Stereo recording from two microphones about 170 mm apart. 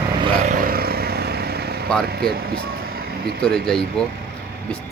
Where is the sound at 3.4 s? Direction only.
5° left (ahead or behind).